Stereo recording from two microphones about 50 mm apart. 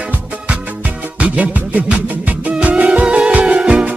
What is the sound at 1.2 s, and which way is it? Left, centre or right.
Music, right.